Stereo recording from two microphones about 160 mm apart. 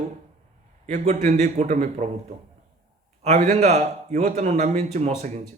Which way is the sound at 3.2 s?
45° right (ahead or behind).